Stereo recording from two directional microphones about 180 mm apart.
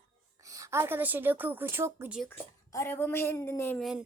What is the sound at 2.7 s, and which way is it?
A woman's voice, 15° left (ahead or behind).